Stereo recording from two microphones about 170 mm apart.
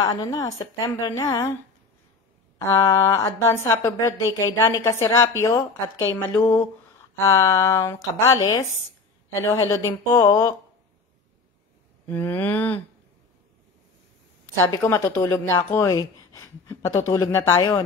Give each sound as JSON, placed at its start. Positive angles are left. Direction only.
{"t": 0.0, "sound": "a woman's voice", "side_deg": 20}
{"t": 2.6, "sound": "a woman's voice", "side_deg": 15}
{"t": 12.1, "sound": "a woman's voice", "side_deg": 10}
{"t": 14.6, "sound": "a woman's voice", "side_deg": 15}